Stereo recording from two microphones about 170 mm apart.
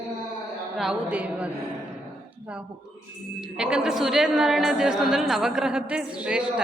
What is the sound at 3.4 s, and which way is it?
A woman's voice, 5° right (ahead or behind).